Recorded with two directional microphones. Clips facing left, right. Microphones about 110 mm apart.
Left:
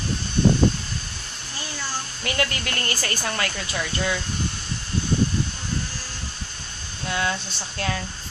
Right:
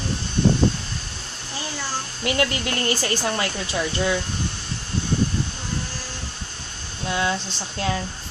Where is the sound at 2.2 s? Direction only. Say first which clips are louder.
Right 4 dB; 20° right (ahead or behind).